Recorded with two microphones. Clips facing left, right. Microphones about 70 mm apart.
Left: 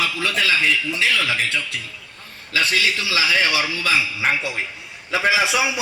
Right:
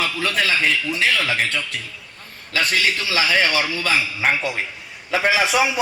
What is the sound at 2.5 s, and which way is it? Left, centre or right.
Speech, right.